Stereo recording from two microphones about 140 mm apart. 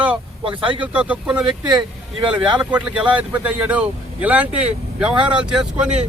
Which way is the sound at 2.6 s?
10° right (ahead or behind).